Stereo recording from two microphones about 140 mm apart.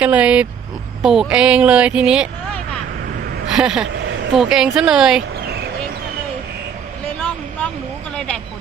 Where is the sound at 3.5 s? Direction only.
5° right (ahead or behind).